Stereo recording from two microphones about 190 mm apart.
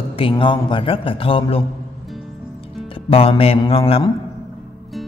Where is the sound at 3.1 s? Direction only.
30° left (ahead or behind).